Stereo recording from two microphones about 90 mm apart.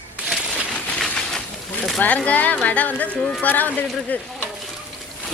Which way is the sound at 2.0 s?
15° left (ahead or behind).